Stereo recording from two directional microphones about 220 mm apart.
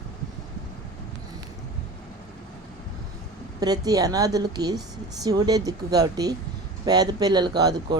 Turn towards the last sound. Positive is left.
turn(degrees=-20)  # may be behind; listen again after turning